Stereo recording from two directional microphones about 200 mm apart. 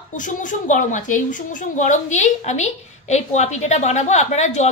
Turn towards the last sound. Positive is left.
turn(degrees=35)  # may be behind; listen again after turning